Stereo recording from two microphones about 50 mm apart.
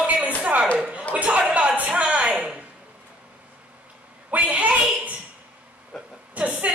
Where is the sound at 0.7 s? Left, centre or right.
Right.